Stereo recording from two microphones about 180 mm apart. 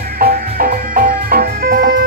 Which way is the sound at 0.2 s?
55° right (ahead or behind).